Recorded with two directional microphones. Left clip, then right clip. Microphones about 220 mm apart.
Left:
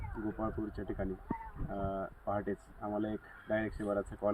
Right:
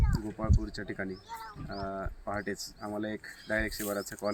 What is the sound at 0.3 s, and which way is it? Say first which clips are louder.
Speech: left 3 dB; 20° right (ahead or behind).